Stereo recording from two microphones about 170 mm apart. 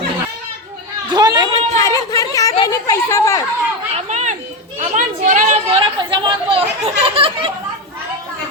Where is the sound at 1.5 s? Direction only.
20° left (ahead or behind).